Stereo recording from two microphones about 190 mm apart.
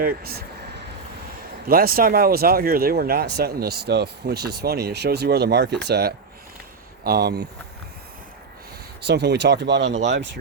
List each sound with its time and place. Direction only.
0.0 s a sound: 50° right (ahead or behind)
1.6 s speech: 50° right (ahead or behind)
9.0 s speech: 60° right (ahead or behind)